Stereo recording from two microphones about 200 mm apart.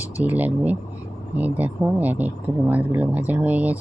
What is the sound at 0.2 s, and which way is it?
Speech, 10° right (ahead or behind).